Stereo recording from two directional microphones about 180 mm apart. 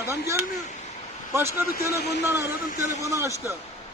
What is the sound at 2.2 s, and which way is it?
A man's voice, 15° right (ahead or behind).